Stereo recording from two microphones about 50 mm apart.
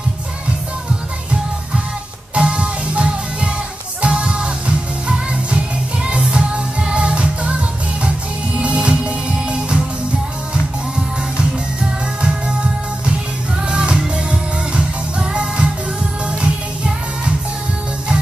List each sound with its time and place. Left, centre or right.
2.3 s music: right
13.7 s music: centre